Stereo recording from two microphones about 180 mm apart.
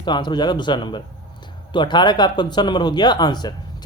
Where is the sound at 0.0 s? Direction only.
25° left (ahead or behind).